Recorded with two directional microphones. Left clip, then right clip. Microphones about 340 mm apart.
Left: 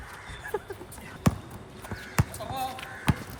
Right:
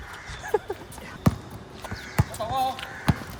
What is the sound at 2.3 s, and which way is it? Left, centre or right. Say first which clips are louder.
Basketball bounce: right 7 dB; centre.